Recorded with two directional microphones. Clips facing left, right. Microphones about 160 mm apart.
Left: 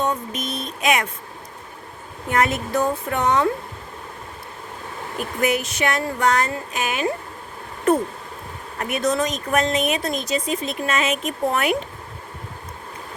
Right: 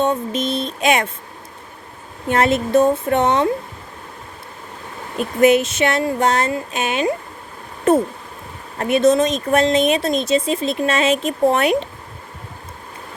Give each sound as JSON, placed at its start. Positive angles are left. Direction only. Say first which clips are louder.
{"t": 0.0, "sound": "speech", "louder": "right 5 dB", "side_deg": -25}
{"t": 2.2, "sound": "speech", "louder": "right 4 dB", "side_deg": -25}
{"t": 5.1, "sound": "speech", "louder": "right 8 dB", "side_deg": -25}